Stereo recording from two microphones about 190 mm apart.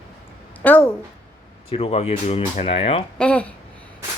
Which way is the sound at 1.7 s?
30° left (ahead or behind).